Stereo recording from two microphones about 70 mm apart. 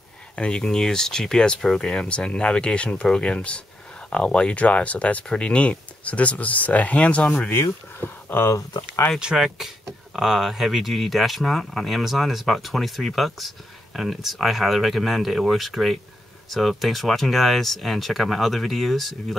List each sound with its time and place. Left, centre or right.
0.4 s speech: centre
8.0 s speech: left
9.2 s speech: centre